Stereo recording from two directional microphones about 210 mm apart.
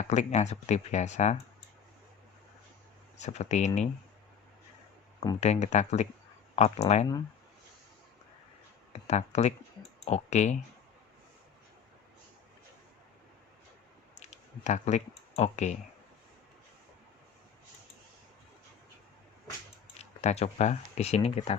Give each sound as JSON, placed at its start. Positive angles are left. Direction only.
{"t": 0.0, "sound": "speech", "side_deg": 35}
{"t": 3.2, "sound": "speech", "side_deg": 35}
{"t": 5.4, "sound": "speech", "side_deg": 30}
{"t": 8.9, "sound": "a sound", "side_deg": 30}
{"t": 10.1, "sound": "speech", "side_deg": 30}
{"t": 14.2, "sound": "speech", "side_deg": 35}
{"t": 20.0, "sound": "speech", "side_deg": 30}